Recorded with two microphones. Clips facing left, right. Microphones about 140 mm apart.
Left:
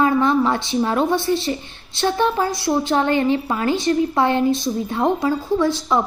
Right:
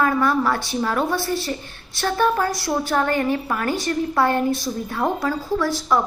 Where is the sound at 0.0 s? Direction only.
20° left (ahead or behind).